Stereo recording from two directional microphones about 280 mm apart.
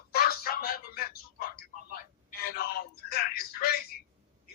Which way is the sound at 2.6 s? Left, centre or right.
Left.